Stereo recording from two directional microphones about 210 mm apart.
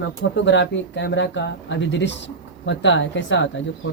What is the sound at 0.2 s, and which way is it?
Speech, 60° left (ahead or behind).